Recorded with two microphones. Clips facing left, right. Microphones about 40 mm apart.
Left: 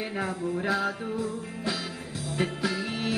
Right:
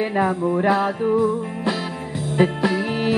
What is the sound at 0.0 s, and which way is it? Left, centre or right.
Music, right.